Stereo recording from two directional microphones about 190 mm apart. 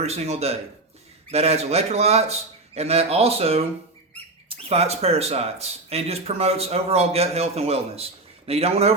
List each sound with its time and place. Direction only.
0.0 s speech: 35° right (ahead or behind)